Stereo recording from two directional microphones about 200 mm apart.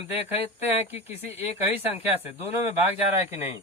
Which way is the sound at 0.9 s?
30° left (ahead or behind).